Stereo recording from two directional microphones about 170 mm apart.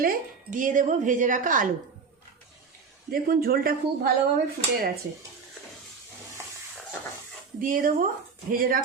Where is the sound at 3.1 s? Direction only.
60° right (ahead or behind).